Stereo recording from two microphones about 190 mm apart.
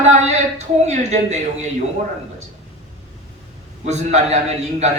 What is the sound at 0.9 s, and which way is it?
Speech, 35° right (ahead or behind).